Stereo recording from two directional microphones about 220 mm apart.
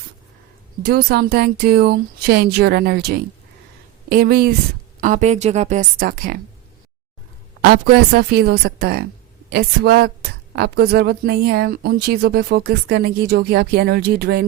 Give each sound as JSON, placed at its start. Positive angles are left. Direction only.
{"t": 0.8, "sound": "a woman's voice", "side_deg": -45}
{"t": 7.6, "sound": "a woman's voice", "side_deg": -45}